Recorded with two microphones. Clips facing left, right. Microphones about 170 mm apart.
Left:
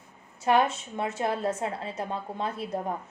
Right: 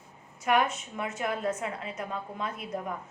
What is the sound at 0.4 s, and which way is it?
A woman's voice, 30° left (ahead or behind).